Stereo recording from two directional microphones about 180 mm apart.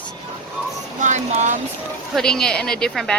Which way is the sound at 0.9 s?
40° right (ahead or behind).